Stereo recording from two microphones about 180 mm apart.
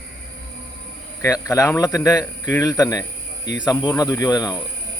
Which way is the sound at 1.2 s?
15° left (ahead or behind).